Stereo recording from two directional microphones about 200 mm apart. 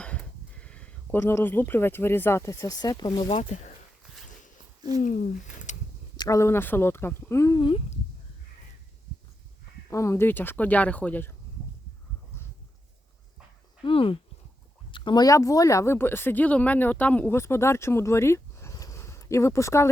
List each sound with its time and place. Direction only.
0.0 s speech: 5° left (ahead or behind); by 3.3 s 20° left (ahead or behind)
3.3 s speech: 35° left (ahead or behind)
5.7 s a sound: 35° left (ahead or behind)
6.1 s speech: 15° left (ahead or behind)
9.9 s speech: 15° left (ahead or behind)
13.8 s speech: 25° left (ahead or behind)